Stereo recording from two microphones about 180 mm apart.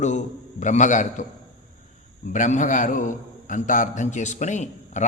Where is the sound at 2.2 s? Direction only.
45° left (ahead or behind).